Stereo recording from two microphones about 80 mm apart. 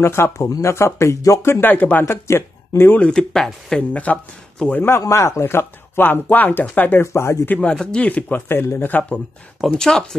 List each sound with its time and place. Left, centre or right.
0.0 s speech: left
0.4 s speech: left
3.0 s speech: centre
3.9 s speech: centre
5.0 s speech: left
7.1 s speech: left
7.4 s speech: centre
9.7 s speech: centre